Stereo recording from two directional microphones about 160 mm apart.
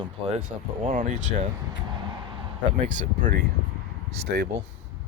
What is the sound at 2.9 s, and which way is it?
Speech, 55° right (ahead or behind).